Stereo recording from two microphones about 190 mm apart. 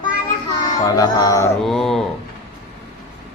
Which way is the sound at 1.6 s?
Centre (ahead or behind).